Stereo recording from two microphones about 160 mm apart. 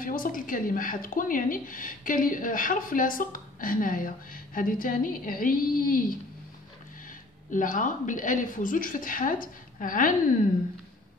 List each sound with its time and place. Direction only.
0.0 s speech: 60° left (ahead or behind)
7.5 s speech: 55° left (ahead or behind)